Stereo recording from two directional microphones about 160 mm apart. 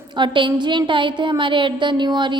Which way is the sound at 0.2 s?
30° right (ahead or behind).